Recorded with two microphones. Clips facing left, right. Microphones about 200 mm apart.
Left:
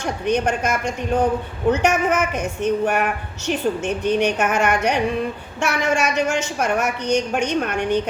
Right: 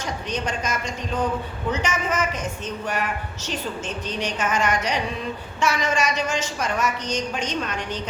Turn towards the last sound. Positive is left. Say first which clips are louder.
# left 8 dB
turn(degrees=60)  # may be behind; listen again after turning